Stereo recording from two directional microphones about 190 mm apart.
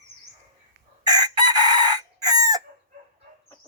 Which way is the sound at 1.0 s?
20° right (ahead or behind).